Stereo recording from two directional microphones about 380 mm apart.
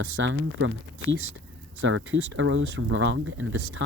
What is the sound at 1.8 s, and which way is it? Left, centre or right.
Speech, right.